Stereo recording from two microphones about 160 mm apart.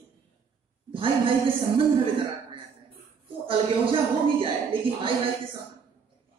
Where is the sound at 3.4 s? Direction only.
35° right (ahead or behind).